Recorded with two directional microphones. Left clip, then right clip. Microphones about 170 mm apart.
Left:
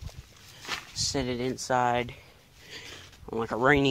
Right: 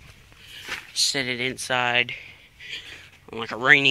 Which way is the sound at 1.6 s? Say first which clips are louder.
Right 3 dB; 15° left (ahead or behind).